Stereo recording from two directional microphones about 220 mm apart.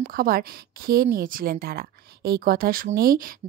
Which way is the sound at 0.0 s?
40° right (ahead or behind).